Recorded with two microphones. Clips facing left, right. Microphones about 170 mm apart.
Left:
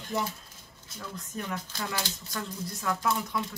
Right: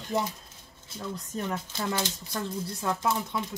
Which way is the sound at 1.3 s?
25° right (ahead or behind).